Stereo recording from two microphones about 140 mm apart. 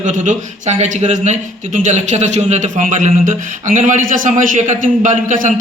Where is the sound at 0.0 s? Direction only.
65° right (ahead or behind).